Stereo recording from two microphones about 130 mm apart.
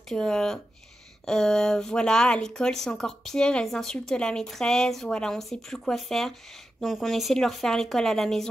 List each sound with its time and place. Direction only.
0.1 s speech: 5° left (ahead or behind)